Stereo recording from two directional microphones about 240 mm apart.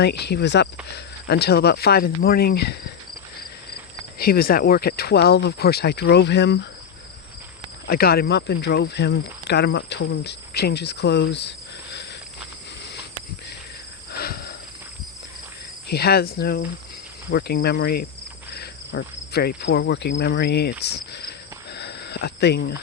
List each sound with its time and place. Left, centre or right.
0.0 s speech: left
4.2 s speech: left
7.9 s speech: left
14.1 s a sound: left
15.9 s speech: left
18.5 s insect: left